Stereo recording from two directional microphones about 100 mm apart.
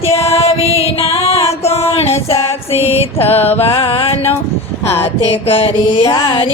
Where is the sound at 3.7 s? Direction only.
60° left (ahead or behind).